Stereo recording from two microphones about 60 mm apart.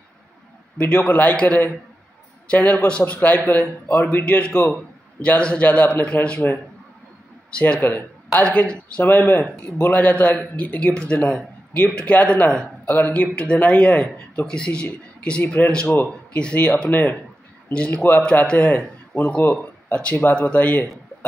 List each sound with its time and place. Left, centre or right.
0.7 s a man's voice: left
7.8 s speech: left
8.3 s a man's voice: left
12.8 s a man's voice: left